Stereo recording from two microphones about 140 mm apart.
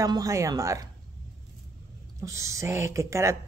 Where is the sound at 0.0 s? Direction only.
25° right (ahead or behind).